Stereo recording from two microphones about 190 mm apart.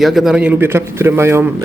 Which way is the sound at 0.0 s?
Centre (ahead or behind).